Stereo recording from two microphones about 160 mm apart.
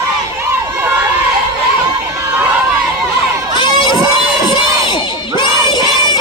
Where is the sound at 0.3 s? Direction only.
10° right (ahead or behind).